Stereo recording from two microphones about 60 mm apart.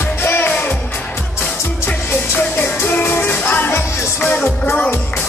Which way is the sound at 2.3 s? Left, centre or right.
Left.